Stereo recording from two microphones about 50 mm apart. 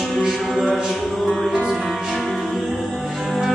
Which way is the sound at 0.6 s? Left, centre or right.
Centre.